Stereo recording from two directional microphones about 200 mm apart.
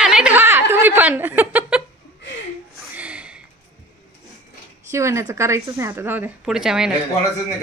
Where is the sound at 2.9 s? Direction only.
5° right (ahead or behind).